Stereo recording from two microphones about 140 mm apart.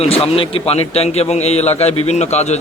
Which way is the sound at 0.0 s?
45° left (ahead or behind).